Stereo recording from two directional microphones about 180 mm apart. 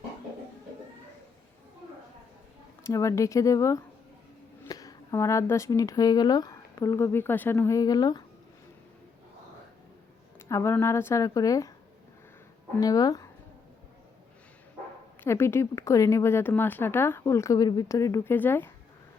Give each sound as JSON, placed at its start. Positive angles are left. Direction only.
{"t": 2.8, "sound": "speech", "side_deg": 15}
{"t": 10.5, "sound": "speech", "side_deg": 15}
{"t": 12.8, "sound": "speech", "side_deg": 20}
{"t": 15.2, "sound": "speech", "side_deg": 15}